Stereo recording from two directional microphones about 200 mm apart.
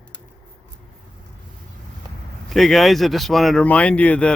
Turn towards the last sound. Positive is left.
turn(degrees=5)  # may be behind; listen again after turning